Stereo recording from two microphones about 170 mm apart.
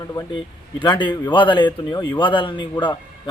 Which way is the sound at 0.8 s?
30° left (ahead or behind).